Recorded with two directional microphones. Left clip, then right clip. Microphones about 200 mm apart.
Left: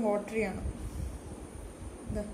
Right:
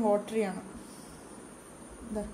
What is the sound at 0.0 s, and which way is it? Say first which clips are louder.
Speech: right 3 dB; 45° right (ahead or behind).